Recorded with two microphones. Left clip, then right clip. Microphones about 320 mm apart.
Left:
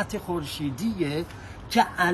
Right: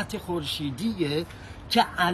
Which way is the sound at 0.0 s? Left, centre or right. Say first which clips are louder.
Left 1 dB; centre.